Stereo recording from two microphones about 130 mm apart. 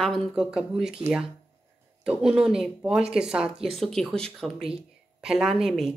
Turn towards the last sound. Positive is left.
turn(degrees=-5)  # may be behind; listen again after turning